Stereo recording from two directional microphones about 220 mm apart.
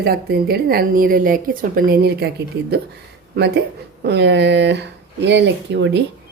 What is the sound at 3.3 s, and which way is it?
Speech, 45° right (ahead or behind).